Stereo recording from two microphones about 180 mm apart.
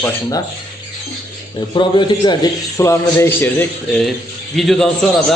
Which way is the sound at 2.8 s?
15° left (ahead or behind).